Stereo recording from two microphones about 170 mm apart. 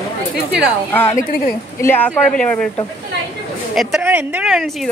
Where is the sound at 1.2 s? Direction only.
55° left (ahead or behind).